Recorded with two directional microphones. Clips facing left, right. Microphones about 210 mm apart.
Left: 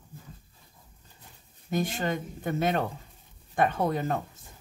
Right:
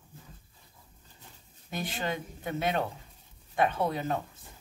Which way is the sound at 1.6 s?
45° left (ahead or behind).